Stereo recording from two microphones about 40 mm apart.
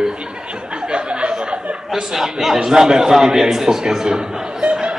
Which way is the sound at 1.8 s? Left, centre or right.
Centre.